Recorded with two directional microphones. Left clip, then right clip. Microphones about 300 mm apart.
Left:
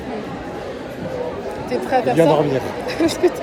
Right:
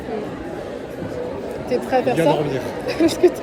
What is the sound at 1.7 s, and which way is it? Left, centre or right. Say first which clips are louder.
Speech: left 1 dB; centre.